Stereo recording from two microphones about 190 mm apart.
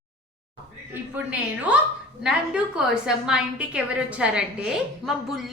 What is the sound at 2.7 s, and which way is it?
A woman's voice, 5° right (ahead or behind).